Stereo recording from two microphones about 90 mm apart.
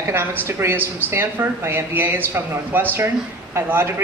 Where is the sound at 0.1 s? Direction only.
25° right (ahead or behind).